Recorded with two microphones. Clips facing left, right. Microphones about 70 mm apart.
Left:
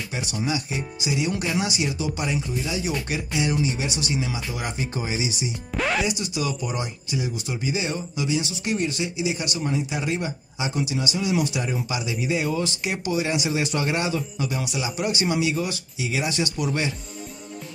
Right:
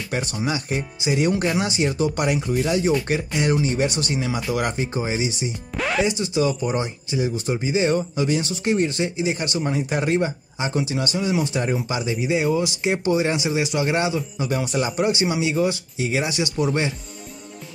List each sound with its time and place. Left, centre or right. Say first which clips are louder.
0.5 s speech: right 2 dB; right
3.1 s speech: right 4 dB; right
4.5 s speech: right 7 dB; right
4.7 s speech: right 4 dB; right
5.8 s music: right 2 dB; centre
6.0 s speech: right 5 dB; right
7.9 s speech: right 5 dB; right
8.6 s speech: right 7 dB; right
9.8 s speech: right 5 dB; right
13.6 s speech: right 3 dB; centre
13.8 s speech: right 3 dB; right
14.5 s speech: right 5 dB; right
15.0 s speech: right 2 dB; right